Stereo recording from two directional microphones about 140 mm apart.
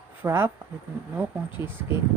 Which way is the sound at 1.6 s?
15° right (ahead or behind).